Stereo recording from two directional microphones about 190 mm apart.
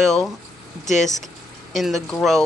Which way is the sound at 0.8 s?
40° left (ahead or behind).